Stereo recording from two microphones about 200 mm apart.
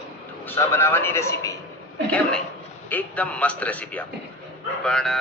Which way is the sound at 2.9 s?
5° left (ahead or behind).